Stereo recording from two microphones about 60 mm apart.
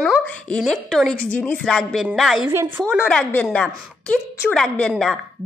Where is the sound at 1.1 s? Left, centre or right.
Left.